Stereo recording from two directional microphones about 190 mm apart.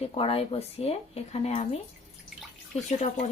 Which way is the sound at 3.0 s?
35° left (ahead or behind).